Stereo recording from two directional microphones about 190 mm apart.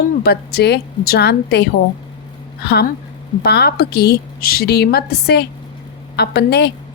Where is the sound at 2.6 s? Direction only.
60° left (ahead or behind).